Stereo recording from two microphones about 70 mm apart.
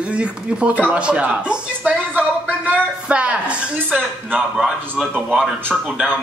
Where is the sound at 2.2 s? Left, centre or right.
Right.